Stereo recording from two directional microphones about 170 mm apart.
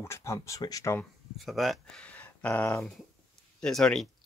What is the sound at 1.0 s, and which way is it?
Speech, centre (ahead or behind).